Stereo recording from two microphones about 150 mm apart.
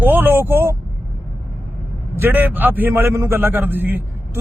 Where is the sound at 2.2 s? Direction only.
10° right (ahead or behind).